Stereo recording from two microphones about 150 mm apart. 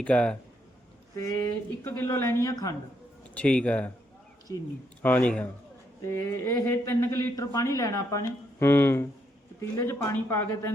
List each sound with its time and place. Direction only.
0.0 s speech: 10° left (ahead or behind)
1.1 s speech: 20° left (ahead or behind)
3.3 s speech: 10° left (ahead or behind)
4.5 s speech: 25° left (ahead or behind)
5.0 s speech: 10° left (ahead or behind)